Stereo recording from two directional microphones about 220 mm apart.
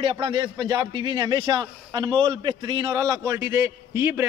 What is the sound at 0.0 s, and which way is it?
A man's voice, 25° right (ahead or behind).